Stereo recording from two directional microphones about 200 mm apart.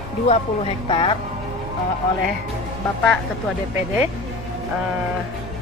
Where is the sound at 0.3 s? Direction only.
30° left (ahead or behind).